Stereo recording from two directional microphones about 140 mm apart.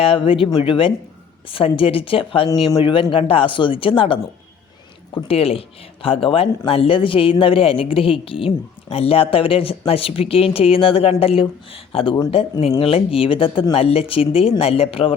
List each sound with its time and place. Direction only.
0.0 s a man's voice: 40° left (ahead or behind)